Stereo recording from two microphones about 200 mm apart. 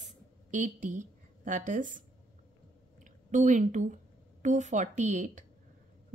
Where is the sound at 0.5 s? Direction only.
40° right (ahead or behind).